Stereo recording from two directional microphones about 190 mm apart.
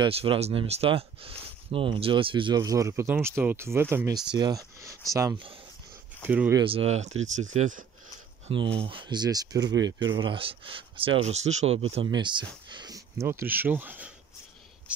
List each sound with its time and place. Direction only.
0.0 s speech: 30° right (ahead or behind); by 6.5 s 10° right (ahead or behind)
6.5 s speech: 25° right (ahead or behind)
8.7 s speech: 25° right (ahead or behind); by 15.0 s 5° right (ahead or behind)